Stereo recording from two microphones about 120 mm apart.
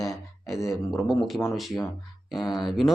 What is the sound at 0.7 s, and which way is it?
Speech, centre (ahead or behind).